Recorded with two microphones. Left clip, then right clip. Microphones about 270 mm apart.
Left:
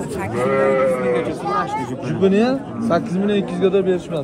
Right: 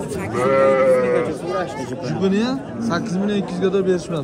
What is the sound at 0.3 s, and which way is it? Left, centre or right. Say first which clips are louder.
Speech: right 2 dB; right.